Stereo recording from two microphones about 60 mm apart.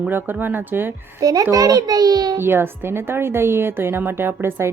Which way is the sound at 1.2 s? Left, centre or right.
Right.